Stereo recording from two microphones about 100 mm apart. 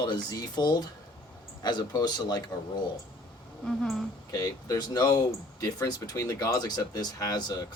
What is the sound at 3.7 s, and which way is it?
Speech, centre (ahead or behind).